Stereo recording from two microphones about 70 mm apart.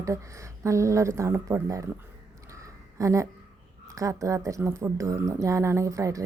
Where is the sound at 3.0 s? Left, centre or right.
Right.